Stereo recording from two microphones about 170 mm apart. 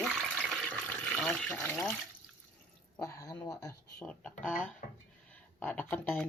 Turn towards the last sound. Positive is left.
turn(degrees=10)  # may be behind; listen again after turning